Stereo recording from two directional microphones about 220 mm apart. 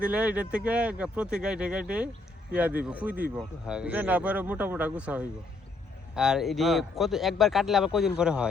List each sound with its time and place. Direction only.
0.0 s speech: 5° right (ahead or behind)